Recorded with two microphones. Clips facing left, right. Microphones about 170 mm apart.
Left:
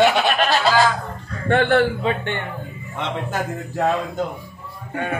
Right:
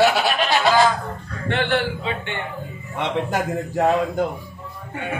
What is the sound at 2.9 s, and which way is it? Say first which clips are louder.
A man's voice: right 3 dB; 15° right (ahead or behind).